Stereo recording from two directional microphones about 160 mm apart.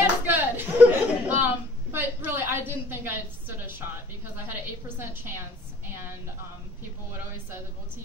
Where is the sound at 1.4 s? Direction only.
15° right (ahead or behind).